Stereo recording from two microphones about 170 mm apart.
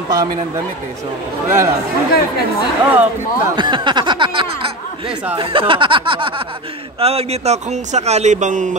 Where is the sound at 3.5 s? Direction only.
30° right (ahead or behind).